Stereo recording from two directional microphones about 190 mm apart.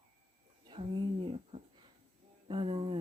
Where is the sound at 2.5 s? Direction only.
30° right (ahead or behind).